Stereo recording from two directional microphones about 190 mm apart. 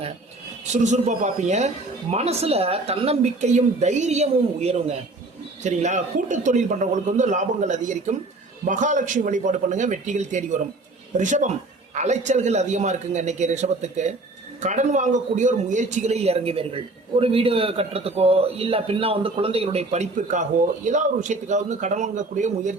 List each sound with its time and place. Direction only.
0.7 s a man's voice: 40° right (ahead or behind)